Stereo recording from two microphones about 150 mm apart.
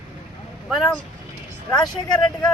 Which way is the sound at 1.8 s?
30° left (ahead or behind).